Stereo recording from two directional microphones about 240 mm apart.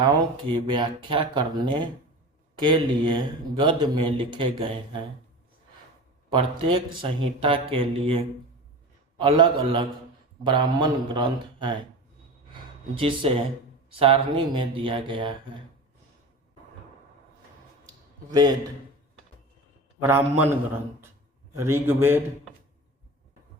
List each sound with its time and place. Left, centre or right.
0.0 s speech: centre
6.3 s speech: right
13.0 s speech: right
18.3 s a man's voice: centre
20.0 s a man's voice: centre
21.6 s a man's voice: centre